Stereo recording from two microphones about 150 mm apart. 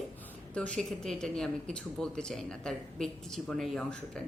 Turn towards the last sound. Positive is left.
turn(degrees=5)  # may be behind; listen again after turning